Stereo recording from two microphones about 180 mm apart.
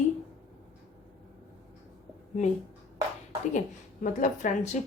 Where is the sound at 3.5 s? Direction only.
45° left (ahead or behind).